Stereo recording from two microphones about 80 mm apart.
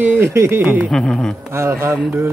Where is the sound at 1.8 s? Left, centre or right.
Right.